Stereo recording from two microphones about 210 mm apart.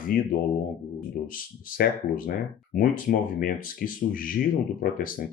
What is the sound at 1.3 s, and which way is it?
Speech, 45° left (ahead or behind).